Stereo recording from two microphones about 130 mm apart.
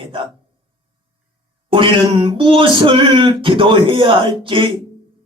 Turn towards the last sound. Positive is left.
turn(degrees=-40)  # may be behind; listen again after turning